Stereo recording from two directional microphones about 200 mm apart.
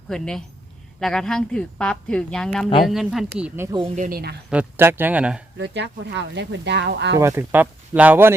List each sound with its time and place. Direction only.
0.1 s a woman's voice: 5° left (ahead or behind)
3.8 s speech: 35° right (ahead or behind)
4.4 s speech: 10° right (ahead or behind)
5.5 s speech: 60° right (ahead or behind)
7.2 s speech: 10° right (ahead or behind)